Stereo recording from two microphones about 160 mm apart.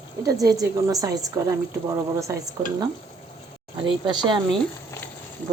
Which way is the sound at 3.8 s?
30° right (ahead or behind).